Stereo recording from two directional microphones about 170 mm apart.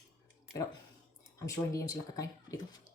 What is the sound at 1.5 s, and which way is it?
Speech, 20° left (ahead or behind).